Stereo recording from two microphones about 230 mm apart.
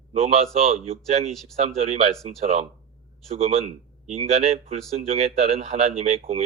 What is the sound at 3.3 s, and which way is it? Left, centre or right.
Speech, right.